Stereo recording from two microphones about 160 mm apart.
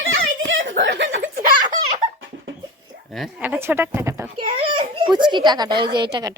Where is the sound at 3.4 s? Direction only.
15° right (ahead or behind).